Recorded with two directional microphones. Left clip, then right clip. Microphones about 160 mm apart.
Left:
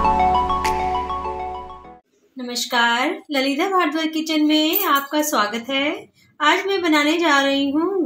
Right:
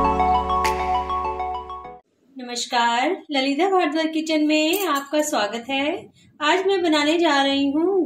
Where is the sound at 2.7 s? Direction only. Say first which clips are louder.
Left 1 dB; 45° left (ahead or behind).